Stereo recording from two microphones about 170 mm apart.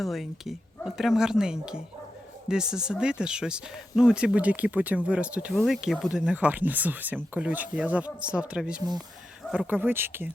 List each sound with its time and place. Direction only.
0.0 s speech: centre (ahead or behind)